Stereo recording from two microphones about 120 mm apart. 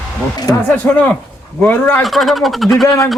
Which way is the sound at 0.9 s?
15° left (ahead or behind).